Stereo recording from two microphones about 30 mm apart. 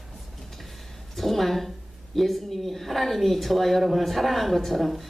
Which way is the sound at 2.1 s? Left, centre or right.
Centre.